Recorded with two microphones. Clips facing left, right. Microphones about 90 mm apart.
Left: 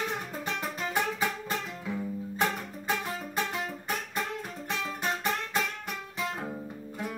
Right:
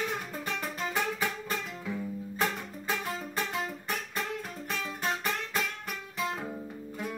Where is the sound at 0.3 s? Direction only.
25° left (ahead or behind).